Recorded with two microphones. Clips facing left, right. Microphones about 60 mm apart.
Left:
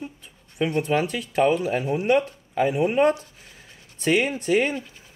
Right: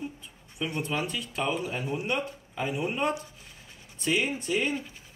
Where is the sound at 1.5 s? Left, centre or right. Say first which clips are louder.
Left 8 dB; left.